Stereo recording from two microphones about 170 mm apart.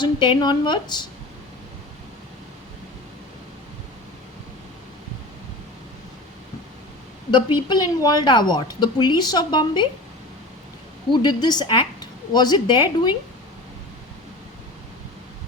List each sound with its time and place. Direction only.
0.0 s a woman's voice: 25° left (ahead or behind)
7.3 s a woman's voice: 25° left (ahead or behind)
11.1 s a woman's voice: 25° left (ahead or behind)